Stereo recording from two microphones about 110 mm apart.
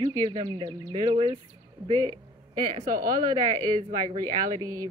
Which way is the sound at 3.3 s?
35° right (ahead or behind).